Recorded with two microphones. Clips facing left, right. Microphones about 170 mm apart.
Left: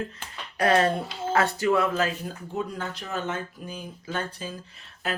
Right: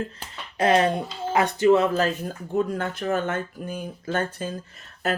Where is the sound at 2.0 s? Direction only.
45° right (ahead or behind).